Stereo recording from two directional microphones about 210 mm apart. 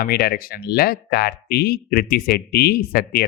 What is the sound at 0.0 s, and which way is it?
Speech, 50° left (ahead or behind).